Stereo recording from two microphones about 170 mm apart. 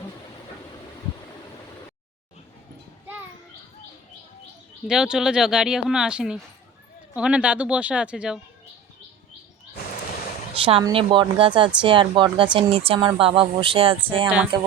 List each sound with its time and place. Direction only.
4.9 s speech: 5° right (ahead or behind)
10.5 s speech: 35° right (ahead or behind)